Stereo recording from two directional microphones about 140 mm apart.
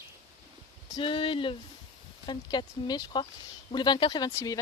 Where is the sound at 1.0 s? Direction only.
40° left (ahead or behind).